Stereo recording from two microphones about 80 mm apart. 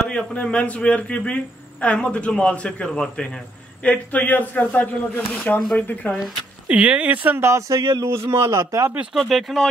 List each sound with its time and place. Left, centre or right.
0.0 s a man's voice: centre
6.1 s speech: centre
6.8 s speech: centre
7.4 s a man's voice: right
9.1 s speech: centre